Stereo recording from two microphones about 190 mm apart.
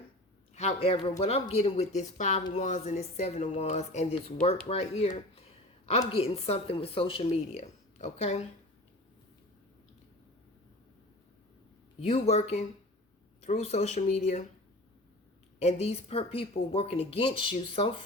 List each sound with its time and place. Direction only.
0.5 s speech: 35° left (ahead or behind)
11.9 s speech: 35° left (ahead or behind)
15.5 s speech: 35° left (ahead or behind)